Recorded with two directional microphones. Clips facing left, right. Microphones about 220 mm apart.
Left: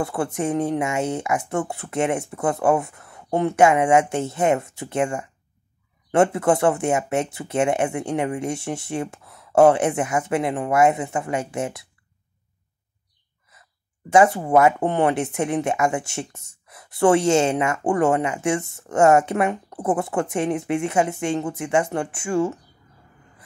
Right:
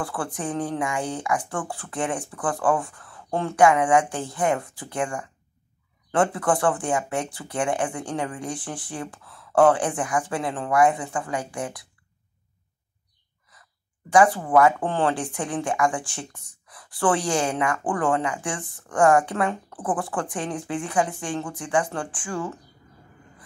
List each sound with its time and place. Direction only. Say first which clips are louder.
0.0 s speech: left 6 dB; 25° left (ahead or behind)
14.1 s speech: left 2 dB; 25° left (ahead or behind)